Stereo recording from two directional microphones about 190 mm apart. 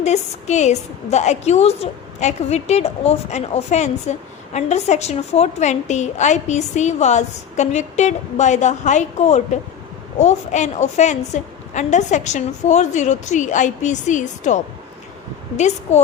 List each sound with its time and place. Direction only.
0.0 s a woman's voice: 35° left (ahead or behind)